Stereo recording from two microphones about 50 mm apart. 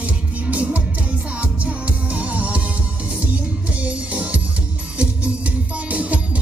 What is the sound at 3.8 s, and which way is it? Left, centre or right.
Music, right.